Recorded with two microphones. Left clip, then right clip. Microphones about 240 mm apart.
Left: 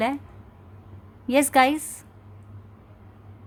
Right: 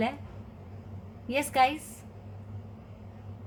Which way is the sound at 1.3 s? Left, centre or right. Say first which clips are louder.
Left 6 dB; left.